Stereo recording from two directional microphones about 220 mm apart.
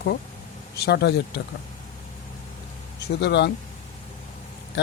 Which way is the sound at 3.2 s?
50° left (ahead or behind).